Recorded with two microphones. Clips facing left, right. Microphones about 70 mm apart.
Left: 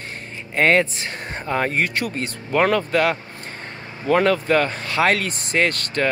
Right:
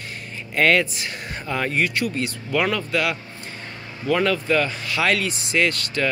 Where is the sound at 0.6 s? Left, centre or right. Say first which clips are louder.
Left 1 dB; left.